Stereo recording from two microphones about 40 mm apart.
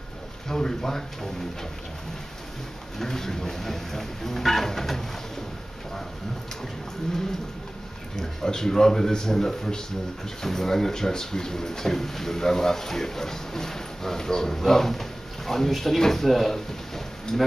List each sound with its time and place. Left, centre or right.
0.5 s speech: centre
3.0 s speech: centre
8.2 s speech: centre